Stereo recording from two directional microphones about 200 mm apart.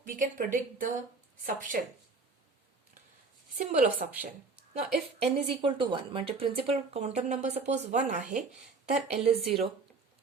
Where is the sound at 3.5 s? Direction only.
35° right (ahead or behind).